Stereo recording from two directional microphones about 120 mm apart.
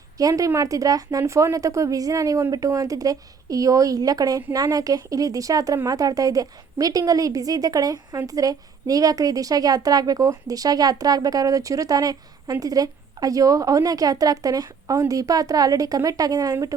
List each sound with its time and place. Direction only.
0.2 s a woman's voice: 30° right (ahead or behind)